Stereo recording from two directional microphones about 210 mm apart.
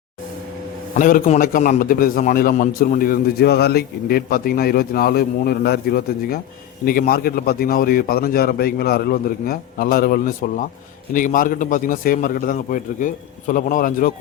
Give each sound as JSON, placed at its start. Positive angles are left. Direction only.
{"t": 0.9, "sound": "a man's voice", "side_deg": 40}